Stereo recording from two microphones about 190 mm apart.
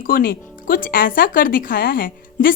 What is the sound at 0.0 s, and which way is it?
Speech, 50° left (ahead or behind).